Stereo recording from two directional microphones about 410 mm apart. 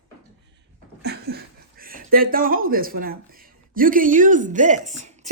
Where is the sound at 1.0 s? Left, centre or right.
Right.